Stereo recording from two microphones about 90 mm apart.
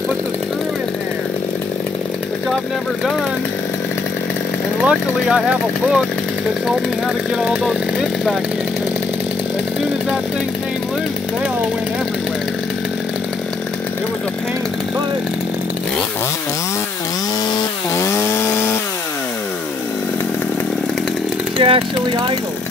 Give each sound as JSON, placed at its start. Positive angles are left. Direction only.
{"t": 4.8, "sound": "speech", "side_deg": -10}
{"t": 7.3, "sound": "speech", "side_deg": -5}
{"t": 17.9, "sound": "chainsaw", "side_deg": 30}
{"t": 21.5, "sound": "speech", "side_deg": -85}